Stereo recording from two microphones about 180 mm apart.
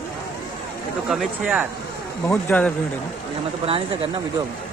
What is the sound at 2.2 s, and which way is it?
Speech, 10° left (ahead or behind).